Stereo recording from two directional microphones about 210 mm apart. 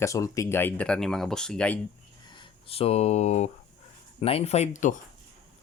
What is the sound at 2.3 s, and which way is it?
Speech, 30° left (ahead or behind).